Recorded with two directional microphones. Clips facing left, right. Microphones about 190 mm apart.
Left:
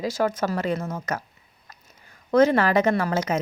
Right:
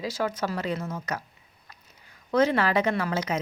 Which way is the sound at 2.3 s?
45° left (ahead or behind).